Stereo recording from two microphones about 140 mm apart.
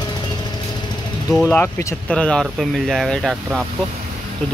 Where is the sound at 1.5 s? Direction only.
15° left (ahead or behind).